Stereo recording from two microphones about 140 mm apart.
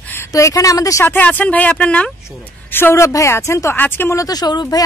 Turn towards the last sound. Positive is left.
turn(degrees=30)  # may be behind; listen again after turning